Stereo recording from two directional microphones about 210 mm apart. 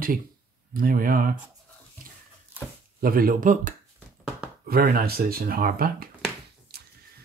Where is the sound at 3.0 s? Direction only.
45° right (ahead or behind).